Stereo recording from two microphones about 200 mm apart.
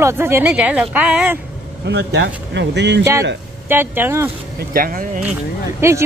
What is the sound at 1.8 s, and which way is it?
Speech, 60° right (ahead or behind).